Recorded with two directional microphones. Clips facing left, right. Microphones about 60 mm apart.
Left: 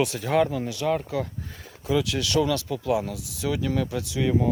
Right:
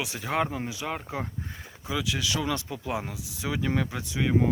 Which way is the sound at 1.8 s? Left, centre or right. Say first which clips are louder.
Left 6 dB; centre.